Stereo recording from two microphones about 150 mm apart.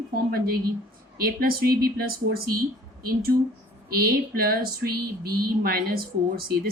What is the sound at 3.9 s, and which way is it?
A woman's voice, 80° right.